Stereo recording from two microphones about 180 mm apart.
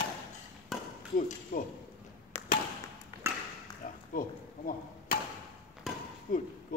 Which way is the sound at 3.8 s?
45° left (ahead or behind).